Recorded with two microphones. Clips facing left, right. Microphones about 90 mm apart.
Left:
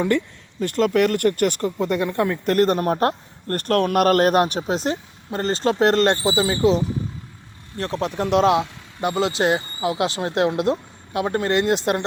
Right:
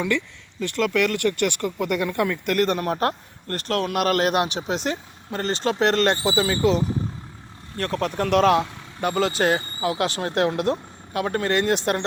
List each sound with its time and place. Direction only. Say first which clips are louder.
0.6 s speech: left 4 dB; 40° left (ahead or behind)
3.5 s speech: left 5 dB; 45° left (ahead or behind); by 6.7 s 25° left (ahead or behind)
7.8 s speech: even; 25° left (ahead or behind)